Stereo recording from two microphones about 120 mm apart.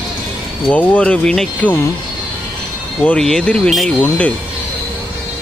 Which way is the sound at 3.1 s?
5° left (ahead or behind).